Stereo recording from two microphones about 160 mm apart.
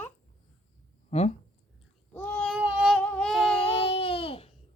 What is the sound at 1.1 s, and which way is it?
Speech, 40° left (ahead or behind).